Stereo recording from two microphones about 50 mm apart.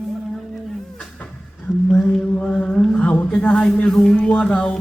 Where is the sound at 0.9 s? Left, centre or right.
Left.